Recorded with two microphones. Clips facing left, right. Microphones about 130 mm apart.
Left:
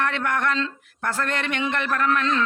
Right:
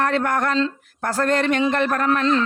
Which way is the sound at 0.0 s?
35° right (ahead or behind).